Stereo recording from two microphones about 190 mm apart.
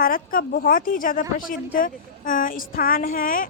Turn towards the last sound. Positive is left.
turn(degrees=45)  # may be behind; listen again after turning